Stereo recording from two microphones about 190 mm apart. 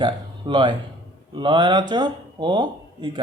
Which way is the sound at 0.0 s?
25° right (ahead or behind).